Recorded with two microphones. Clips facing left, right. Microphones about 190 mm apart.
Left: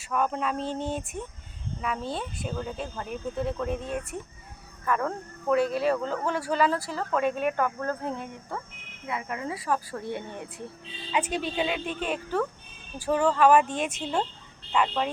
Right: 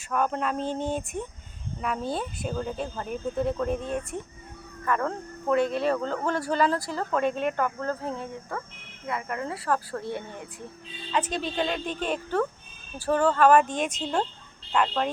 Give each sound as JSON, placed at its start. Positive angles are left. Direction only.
{"t": 0.1, "sound": "speech", "side_deg": 0}
{"t": 7.6, "sound": "speech", "side_deg": -20}
{"t": 8.0, "sound": "speech", "side_deg": 15}